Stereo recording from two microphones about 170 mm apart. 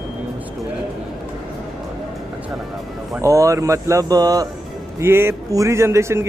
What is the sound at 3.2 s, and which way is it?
Speech, 20° right (ahead or behind).